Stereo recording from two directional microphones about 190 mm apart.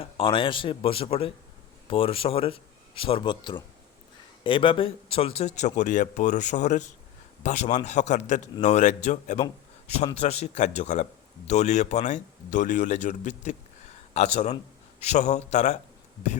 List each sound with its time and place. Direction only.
0.0 s a man's voice: 25° left (ahead or behind)